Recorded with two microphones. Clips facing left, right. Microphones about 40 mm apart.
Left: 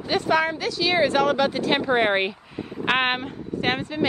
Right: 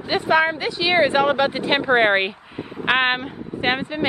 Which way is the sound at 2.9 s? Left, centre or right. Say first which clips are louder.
Right 3 dB; centre.